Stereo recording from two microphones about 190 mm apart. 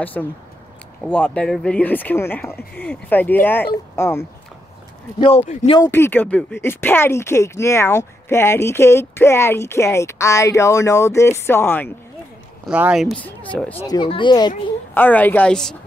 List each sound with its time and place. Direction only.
0.0 s speech: 10° left (ahead or behind)
5.4 s speech: 40° left (ahead or behind)
5.8 s speech: 10° left (ahead or behind)
12.6 s speech: 5° right (ahead or behind)
13.8 s speech: 25° left (ahead or behind)
15.0 s speech: 10° left (ahead or behind)